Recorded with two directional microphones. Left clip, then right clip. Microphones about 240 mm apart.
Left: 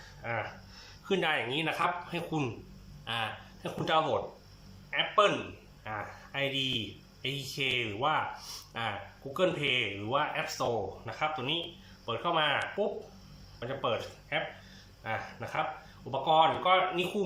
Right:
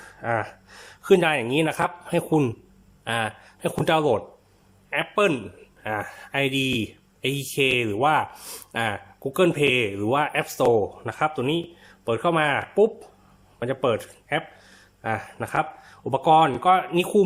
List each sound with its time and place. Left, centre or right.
0.0 s speech: right
3.0 s a sound: right
3.8 s speech: right